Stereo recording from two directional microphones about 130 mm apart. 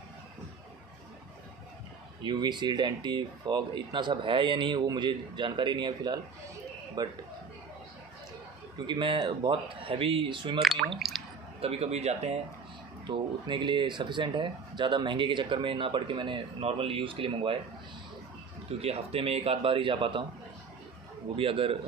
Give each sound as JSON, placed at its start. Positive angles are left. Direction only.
{"t": 2.2, "sound": "speech", "side_deg": -35}
{"t": 8.7, "sound": "speech", "side_deg": -35}
{"t": 11.0, "sound": "drip", "side_deg": 0}
{"t": 11.6, "sound": "a man's voice", "side_deg": -50}
{"t": 13.0, "sound": "speech", "side_deg": -35}
{"t": 18.7, "sound": "a man's voice", "side_deg": -50}
{"t": 21.4, "sound": "a man's voice", "side_deg": -45}